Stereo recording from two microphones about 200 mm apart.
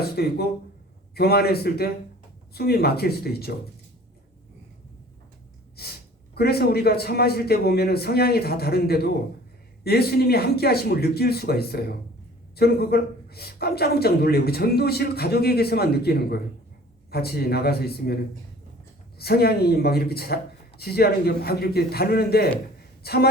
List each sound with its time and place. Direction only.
0.0 s a sound: 50° left (ahead or behind)
1.1 s speech: 50° left (ahead or behind)
5.7 s speech: 50° left (ahead or behind)
19.2 s speech: 50° left (ahead or behind)